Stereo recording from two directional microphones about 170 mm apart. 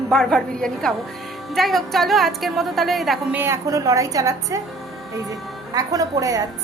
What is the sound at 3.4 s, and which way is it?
A woman's voice, 15° right (ahead or behind).